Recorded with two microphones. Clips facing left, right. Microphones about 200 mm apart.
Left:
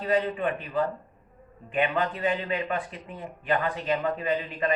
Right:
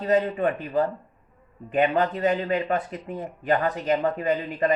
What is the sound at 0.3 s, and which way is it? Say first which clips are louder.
Speech: right 4 dB; 40° right (ahead or behind).